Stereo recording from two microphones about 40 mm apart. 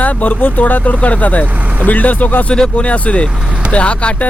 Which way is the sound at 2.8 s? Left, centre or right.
Left.